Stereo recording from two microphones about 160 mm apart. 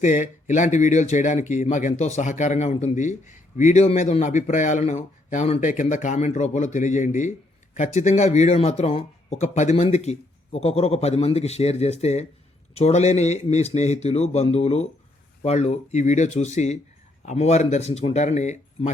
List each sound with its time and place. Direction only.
0.0 s speech: 50° left (ahead or behind)